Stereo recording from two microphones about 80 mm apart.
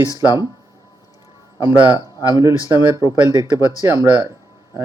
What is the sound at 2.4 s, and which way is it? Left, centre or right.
Speech, right.